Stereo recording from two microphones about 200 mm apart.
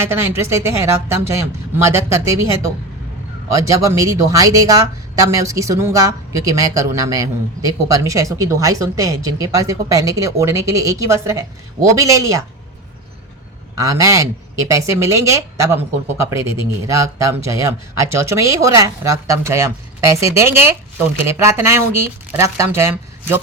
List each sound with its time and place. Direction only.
0.0 s speech: 10° right (ahead or behind)
13.7 s speech: 15° right (ahead or behind)